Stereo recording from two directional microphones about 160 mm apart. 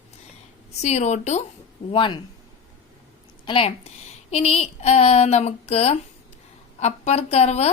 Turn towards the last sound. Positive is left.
turn(degrees=40)  # may be behind; listen again after turning